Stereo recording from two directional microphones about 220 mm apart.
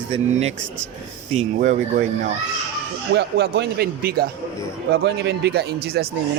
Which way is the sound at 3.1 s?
50° right (ahead or behind).